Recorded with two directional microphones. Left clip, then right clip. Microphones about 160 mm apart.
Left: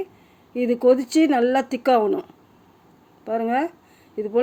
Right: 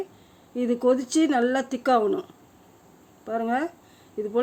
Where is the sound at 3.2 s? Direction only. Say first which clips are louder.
Left 4 dB; 10° left (ahead or behind).